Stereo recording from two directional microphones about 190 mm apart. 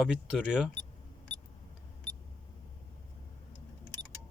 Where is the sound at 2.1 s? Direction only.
25° right (ahead or behind).